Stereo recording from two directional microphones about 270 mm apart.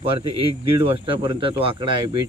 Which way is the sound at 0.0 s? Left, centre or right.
Centre.